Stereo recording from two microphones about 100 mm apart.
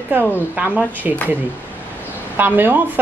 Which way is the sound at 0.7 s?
15° left (ahead or behind).